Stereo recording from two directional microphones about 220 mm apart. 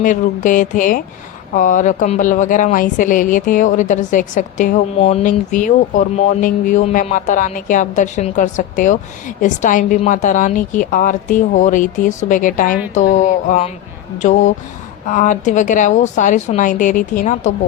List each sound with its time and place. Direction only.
0.0 s a woman's voice: 35° left (ahead or behind)